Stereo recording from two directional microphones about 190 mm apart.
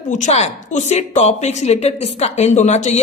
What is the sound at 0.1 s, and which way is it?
A woman's voice, 35° left (ahead or behind).